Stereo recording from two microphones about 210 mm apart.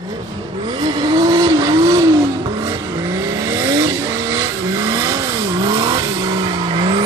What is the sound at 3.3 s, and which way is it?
Vehicle, 15° right (ahead or behind).